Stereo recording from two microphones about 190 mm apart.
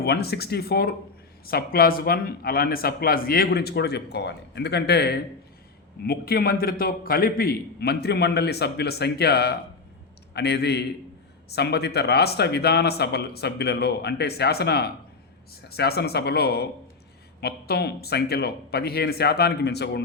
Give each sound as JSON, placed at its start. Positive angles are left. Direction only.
{"t": 0.0, "sound": "a man's voice", "side_deg": 55}